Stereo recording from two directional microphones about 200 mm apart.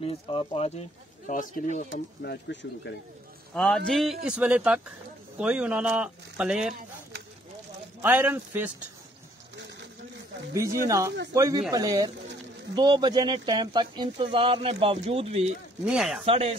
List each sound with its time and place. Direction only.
0.0 s speech: 25° left (ahead or behind)
2.2 s speech: 60° left (ahead or behind)
3.5 s speech: 5° left (ahead or behind)
8.0 s speech: 10° right (ahead or behind)
10.5 s speech: 15° right (ahead or behind); by 15.5 s 30° right (ahead or behind)
15.8 s speech: 5° right (ahead or behind)
16.3 s speech: 30° right (ahead or behind)